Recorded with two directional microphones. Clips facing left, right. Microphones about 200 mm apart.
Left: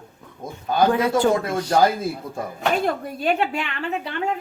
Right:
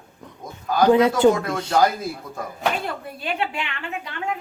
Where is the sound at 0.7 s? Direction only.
25° left (ahead or behind).